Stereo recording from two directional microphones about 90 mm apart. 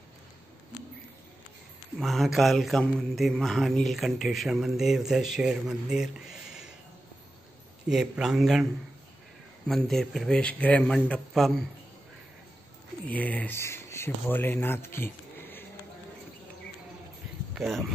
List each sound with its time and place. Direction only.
2.0 s speech: centre (ahead or behind)
7.9 s speech: 5° right (ahead or behind)
9.8 s speech: 5° left (ahead or behind)
10.4 s a man's voice: 15° left (ahead or behind)
11.3 s speech: 5° left (ahead or behind)
13.1 s a man's voice: 15° left (ahead or behind)
13.6 s speech: 30° left (ahead or behind)
17.6 s speech: centre (ahead or behind)